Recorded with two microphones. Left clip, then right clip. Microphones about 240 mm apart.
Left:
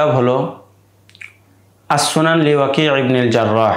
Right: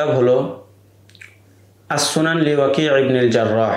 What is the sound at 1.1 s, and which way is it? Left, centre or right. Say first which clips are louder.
Squish: left 6 dB; left.